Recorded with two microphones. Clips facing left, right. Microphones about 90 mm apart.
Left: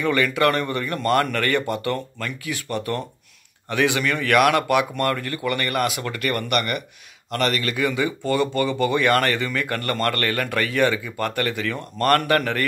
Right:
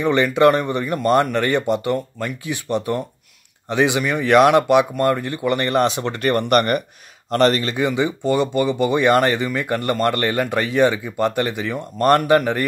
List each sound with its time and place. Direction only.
0.0 s speech: 25° right (ahead or behind)